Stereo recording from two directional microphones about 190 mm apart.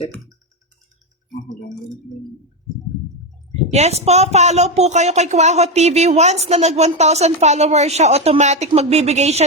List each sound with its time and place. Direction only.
3.5 s speech: 35° right (ahead or behind)